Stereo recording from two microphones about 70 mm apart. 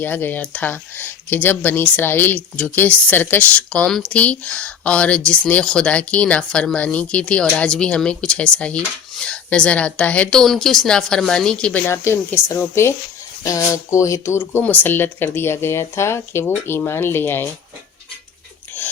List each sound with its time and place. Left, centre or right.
0.0 s speech: left
10.3 s speech: centre
11.8 s speech: left
13.4 s speech: left
14.3 s speech: left
18.8 s a sound: left